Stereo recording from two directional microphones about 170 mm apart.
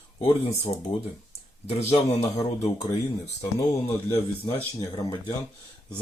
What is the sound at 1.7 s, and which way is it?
Speech, 40° left (ahead or behind).